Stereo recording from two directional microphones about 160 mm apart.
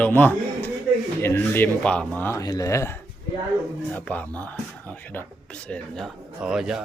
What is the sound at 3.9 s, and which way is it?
Speech, 10° left (ahead or behind).